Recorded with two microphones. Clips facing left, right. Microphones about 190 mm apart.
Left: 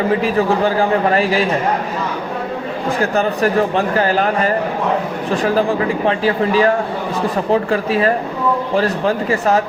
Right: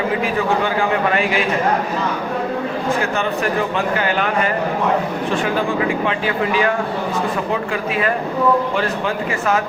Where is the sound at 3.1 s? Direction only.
35° left (ahead or behind).